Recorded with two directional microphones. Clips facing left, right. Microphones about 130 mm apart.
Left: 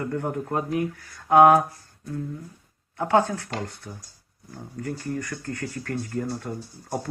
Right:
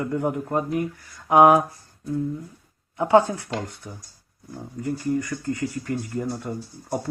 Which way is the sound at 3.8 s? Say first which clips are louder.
Right 1 dB; 5° right (ahead or behind).